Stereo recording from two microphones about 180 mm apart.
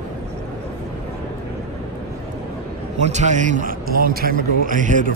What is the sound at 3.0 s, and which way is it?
A man's voice, 40° right (ahead or behind).